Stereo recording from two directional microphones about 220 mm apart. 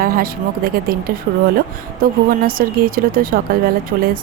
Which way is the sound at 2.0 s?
40° right (ahead or behind).